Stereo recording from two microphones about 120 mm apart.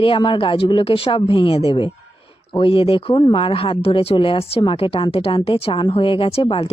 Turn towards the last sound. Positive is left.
turn(degrees=50)  # may be behind; listen again after turning